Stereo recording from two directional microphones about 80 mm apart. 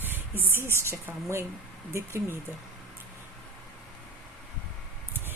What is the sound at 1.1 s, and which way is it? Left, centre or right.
Speech, right.